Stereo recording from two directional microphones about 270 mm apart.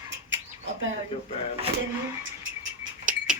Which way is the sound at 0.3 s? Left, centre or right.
Right.